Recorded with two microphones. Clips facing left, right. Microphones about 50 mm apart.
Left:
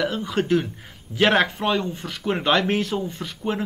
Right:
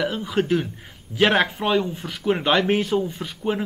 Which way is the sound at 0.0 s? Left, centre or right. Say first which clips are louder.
Right 1 dB; centre.